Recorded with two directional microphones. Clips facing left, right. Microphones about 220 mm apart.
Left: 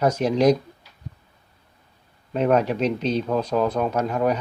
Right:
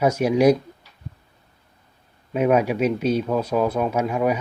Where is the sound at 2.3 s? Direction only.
10° right (ahead or behind).